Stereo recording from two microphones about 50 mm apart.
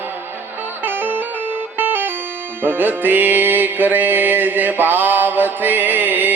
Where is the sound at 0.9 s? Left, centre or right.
Right.